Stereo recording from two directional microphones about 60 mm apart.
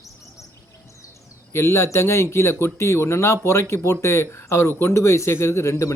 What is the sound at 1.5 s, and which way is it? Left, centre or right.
Speech, left.